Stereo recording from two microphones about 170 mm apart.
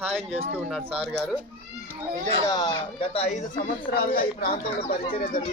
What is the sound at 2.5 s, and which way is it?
Speech, 25° left (ahead or behind).